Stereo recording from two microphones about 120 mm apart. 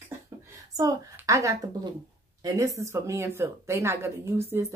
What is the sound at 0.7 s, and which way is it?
Speech, 30° right (ahead or behind).